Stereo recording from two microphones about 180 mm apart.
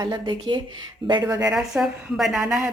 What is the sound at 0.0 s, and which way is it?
Speech, 25° right (ahead or behind).